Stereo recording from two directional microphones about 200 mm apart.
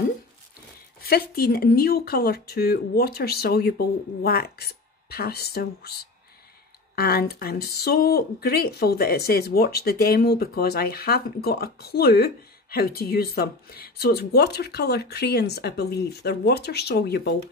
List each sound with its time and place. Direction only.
1.0 s speech: 50° left (ahead or behind)